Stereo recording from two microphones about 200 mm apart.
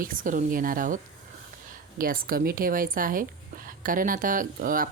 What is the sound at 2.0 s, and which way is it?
A woman's voice, 45° right (ahead or behind).